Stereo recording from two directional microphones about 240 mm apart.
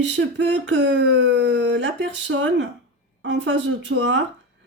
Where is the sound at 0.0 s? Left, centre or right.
Right.